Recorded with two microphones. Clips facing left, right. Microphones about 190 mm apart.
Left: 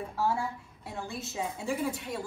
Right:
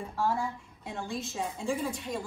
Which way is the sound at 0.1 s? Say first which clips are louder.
Right 1 dB; 10° left (ahead or behind).